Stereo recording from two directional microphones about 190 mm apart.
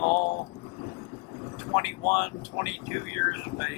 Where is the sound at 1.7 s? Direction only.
15° left (ahead or behind).